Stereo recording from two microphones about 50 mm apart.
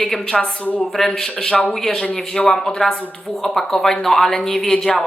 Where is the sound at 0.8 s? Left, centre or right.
Centre.